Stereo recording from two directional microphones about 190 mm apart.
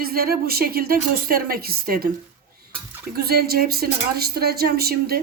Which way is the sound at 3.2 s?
55° right (ahead or behind).